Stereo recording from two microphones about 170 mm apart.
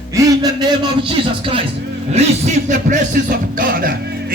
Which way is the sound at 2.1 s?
40° right (ahead or behind).